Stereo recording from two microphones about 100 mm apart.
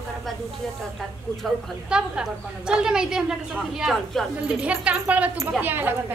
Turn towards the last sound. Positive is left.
turn(degrees=-20)  # may be behind; listen again after turning